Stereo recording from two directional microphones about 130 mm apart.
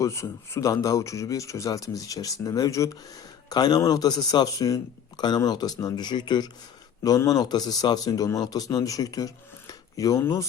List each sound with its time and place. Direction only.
0.0 s a man's voice: 20° left (ahead or behind)